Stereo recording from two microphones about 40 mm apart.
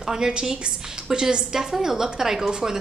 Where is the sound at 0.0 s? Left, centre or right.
Centre.